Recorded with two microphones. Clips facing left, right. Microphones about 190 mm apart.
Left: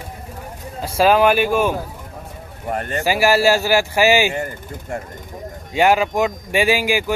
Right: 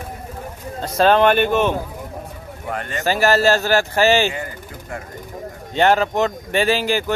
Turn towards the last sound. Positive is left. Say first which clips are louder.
# left 1 dB
turn(degrees=10)  # may be behind; listen again after turning